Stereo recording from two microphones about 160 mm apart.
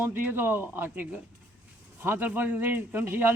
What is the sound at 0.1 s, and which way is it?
A man's voice, 15° right (ahead or behind).